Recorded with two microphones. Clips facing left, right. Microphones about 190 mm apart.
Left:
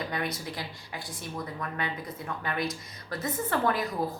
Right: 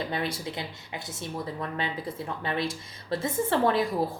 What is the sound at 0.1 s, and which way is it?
Speech, 25° right (ahead or behind).